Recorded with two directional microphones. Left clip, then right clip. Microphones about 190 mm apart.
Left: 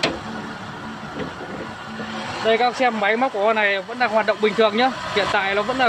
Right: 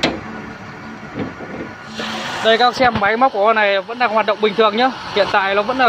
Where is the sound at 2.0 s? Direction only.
50° right (ahead or behind).